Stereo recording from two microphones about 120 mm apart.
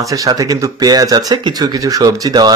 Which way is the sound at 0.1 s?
30° right (ahead or behind).